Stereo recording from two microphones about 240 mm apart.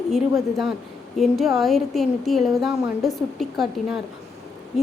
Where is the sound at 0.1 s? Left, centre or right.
Centre.